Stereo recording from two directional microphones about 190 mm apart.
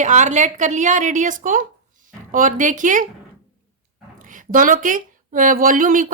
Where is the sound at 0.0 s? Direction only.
40° right (ahead or behind).